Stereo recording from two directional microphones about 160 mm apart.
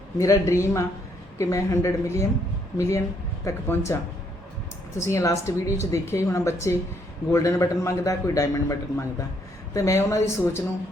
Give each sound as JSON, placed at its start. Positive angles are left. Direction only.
{"t": 0.2, "sound": "a man's voice", "side_deg": 20}
{"t": 4.9, "sound": "a man's voice", "side_deg": 15}